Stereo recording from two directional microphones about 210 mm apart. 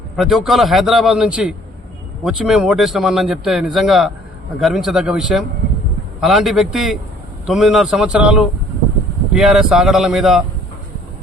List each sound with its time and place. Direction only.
0.2 s speech: centre (ahead or behind)